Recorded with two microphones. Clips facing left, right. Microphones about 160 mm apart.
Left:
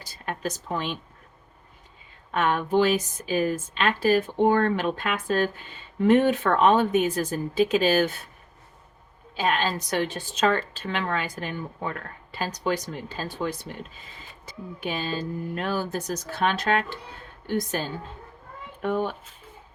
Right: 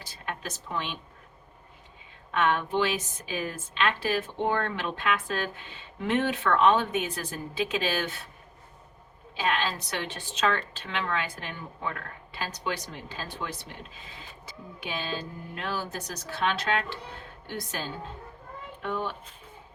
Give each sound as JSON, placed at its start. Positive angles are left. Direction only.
{"t": 0.0, "sound": "a sound", "side_deg": 40}
{"t": 2.3, "sound": "a woman's voice", "side_deg": 40}
{"t": 9.3, "sound": "a woman's voice", "side_deg": 45}
{"t": 14.8, "sound": "a woman's voice", "side_deg": 40}
{"t": 18.8, "sound": "a woman's voice", "side_deg": 45}